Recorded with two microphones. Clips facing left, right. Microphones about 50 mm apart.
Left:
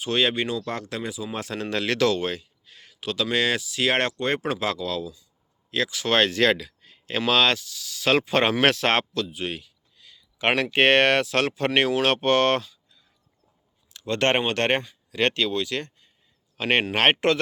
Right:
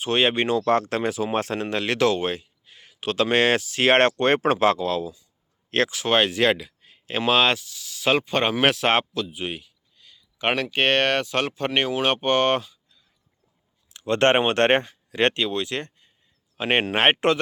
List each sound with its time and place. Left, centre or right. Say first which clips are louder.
0.0 s speech: right 2 dB; right
3.0 s speech: right 4 dB; right
5.7 s speech: right 4 dB; right
6.1 s speech: left 1 dB; centre
8.2 s speech: left 1 dB; centre
8.5 s speech: right 1 dB; centre
9.9 s speech: left 1 dB; centre
13.9 s speech: right 4 dB; right
15.3 s speech: even; right
16.6 s speech: right 1 dB; centre